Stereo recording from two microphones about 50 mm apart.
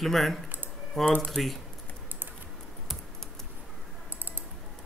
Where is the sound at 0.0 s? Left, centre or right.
Centre.